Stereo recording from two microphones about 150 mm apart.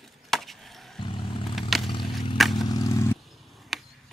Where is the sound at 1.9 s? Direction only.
30° left (ahead or behind).